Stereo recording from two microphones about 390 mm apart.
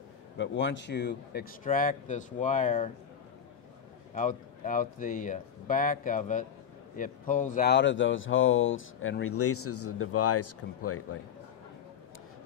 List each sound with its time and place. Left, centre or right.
0.4 s speech: left
4.1 s speech: centre; by 11.1 s left